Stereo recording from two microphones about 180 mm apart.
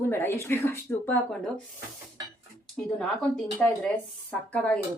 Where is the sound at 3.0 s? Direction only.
5° left (ahead or behind).